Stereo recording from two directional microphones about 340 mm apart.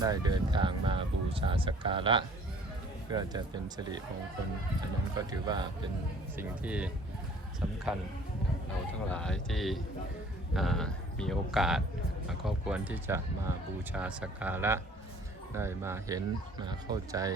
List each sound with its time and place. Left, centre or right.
0.0 s speech: centre
5.1 s speech: centre
9.0 s speech: centre